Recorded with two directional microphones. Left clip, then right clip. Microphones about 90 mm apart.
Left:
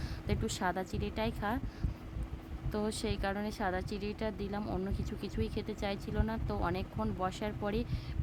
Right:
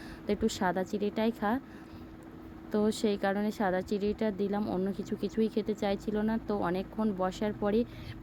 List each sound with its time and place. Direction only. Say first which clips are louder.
0.3 s speech: right 5 dB; 35° right (ahead or behind)
2.7 s speech: right 7 dB; 40° right (ahead or behind)
4.6 s speech: right 5 dB; 25° right (ahead or behind)
4.9 s speech: right 6 dB; 40° right (ahead or behind)